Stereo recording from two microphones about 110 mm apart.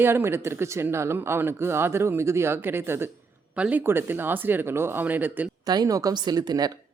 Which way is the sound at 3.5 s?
10° right (ahead or behind).